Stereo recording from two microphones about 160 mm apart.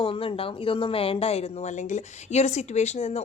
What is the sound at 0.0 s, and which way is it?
A woman's voice, 30° left (ahead or behind).